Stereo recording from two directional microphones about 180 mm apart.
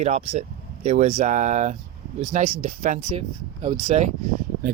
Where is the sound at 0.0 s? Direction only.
35° right (ahead or behind).